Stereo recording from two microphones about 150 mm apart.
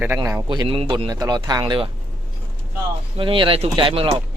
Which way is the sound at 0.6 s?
35° right (ahead or behind).